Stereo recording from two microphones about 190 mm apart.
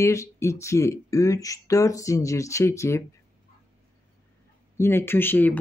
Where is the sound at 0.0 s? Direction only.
15° left (ahead or behind).